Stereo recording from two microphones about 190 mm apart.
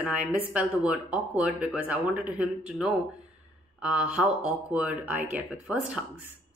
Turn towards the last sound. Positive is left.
turn(degrees=-5)  # may be behind; listen again after turning